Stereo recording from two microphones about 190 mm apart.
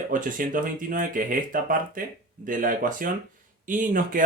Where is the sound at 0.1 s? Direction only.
45° right (ahead or behind).